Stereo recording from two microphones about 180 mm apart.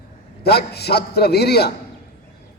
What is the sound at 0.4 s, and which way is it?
A man's voice, 65° left (ahead or behind).